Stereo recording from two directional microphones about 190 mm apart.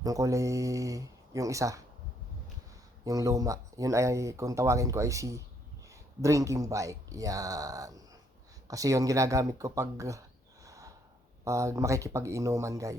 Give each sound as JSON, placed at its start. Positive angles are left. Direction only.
{"t": 0.0, "sound": "speech", "side_deg": -15}
{"t": 3.0, "sound": "speech", "side_deg": -20}
{"t": 10.7, "sound": "snort", "side_deg": -15}
{"t": 11.4, "sound": "speech", "side_deg": -15}